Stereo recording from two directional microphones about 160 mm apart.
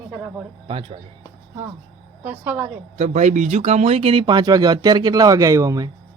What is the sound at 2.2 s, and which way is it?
Speech, 10° right (ahead or behind).